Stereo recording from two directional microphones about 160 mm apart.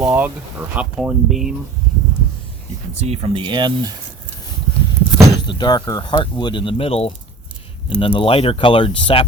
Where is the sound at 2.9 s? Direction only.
40° right (ahead or behind).